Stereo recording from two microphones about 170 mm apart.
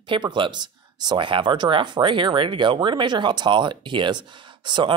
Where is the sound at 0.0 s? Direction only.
30° right (ahead or behind).